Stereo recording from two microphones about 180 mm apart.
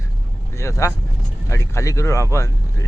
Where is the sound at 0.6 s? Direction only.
15° left (ahead or behind).